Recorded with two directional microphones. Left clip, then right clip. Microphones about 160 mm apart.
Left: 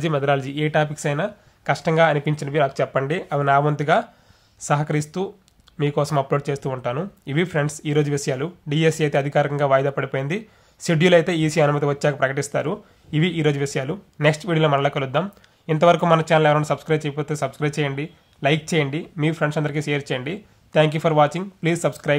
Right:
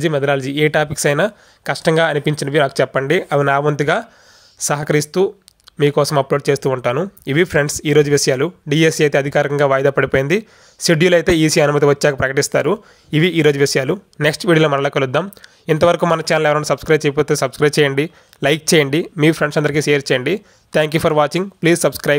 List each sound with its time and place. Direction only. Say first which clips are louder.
0.0 s speech: right 4 dB; 20° right (ahead or behind); by 22.1 s 35° right (ahead or behind)